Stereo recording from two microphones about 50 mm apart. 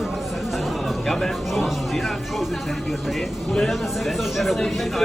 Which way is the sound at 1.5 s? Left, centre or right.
Centre.